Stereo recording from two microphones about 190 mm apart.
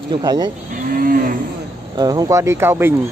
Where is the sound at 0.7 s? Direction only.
45° right (ahead or behind).